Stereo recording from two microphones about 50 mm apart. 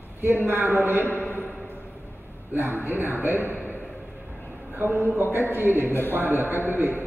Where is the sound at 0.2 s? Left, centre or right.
Right.